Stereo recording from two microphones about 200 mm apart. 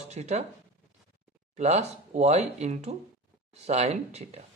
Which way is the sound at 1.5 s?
35° right (ahead or behind).